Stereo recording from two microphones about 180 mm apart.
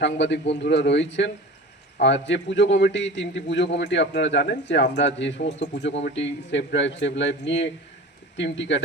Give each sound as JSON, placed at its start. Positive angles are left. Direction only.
{"t": 0.0, "sound": "a man's voice", "side_deg": 80}
{"t": 6.1, "sound": "a man's voice", "side_deg": 90}